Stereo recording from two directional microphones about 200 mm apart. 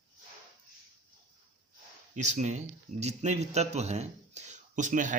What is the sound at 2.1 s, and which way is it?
A man's voice, 35° right (ahead or behind).